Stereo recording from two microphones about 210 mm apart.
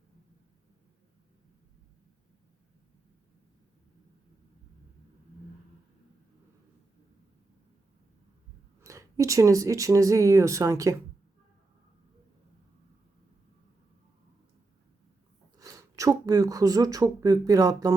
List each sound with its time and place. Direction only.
8.8 s speech: 15° right (ahead or behind)
15.5 s speech: 15° right (ahead or behind)